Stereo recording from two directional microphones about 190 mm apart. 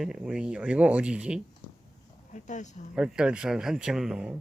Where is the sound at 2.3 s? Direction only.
40° left (ahead or behind).